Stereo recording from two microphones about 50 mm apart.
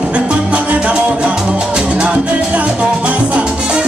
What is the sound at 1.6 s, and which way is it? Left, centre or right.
Music, centre.